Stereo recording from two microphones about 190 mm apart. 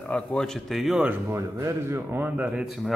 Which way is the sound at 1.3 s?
15° right (ahead or behind).